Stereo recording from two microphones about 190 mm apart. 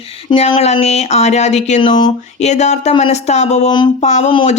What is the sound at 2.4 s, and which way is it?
Speech, 35° left (ahead or behind).